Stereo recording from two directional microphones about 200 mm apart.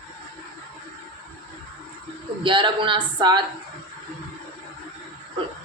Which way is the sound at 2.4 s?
25° right (ahead or behind).